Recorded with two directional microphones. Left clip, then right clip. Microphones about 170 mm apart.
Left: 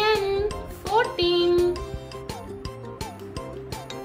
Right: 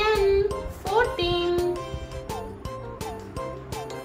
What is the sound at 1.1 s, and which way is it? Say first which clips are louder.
Music: left 4 dB; 20° left (ahead or behind).